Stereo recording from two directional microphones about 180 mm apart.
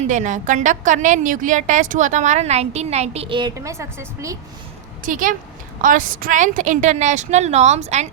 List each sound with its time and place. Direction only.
0.1 s a woman's voice: 45° right (ahead or behind); by 4.4 s 15° right (ahead or behind)
5.0 s a woman's voice: 50° right (ahead or behind)